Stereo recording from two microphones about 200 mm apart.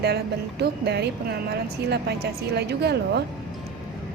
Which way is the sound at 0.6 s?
55° right (ahead or behind).